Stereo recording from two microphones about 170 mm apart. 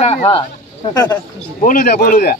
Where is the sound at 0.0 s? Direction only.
35° left (ahead or behind).